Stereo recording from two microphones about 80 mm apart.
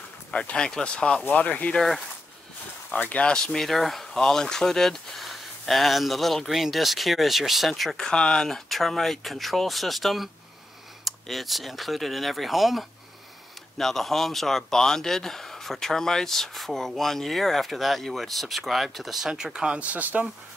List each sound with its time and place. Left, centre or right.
0.3 s speech: centre
2.9 s speech: centre